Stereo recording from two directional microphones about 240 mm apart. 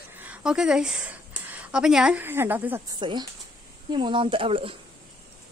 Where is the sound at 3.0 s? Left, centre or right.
Centre.